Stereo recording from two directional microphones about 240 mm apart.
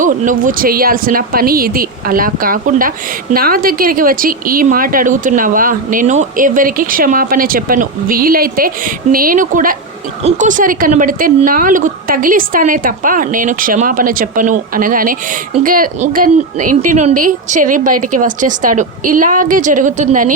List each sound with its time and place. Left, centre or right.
0.0 s a woman's voice: right